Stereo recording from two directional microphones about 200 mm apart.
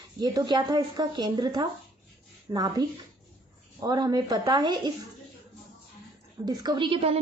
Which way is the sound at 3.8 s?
20° right (ahead or behind).